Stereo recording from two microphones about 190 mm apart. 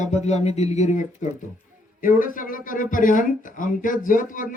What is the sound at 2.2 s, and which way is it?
Speech, 45° left (ahead or behind).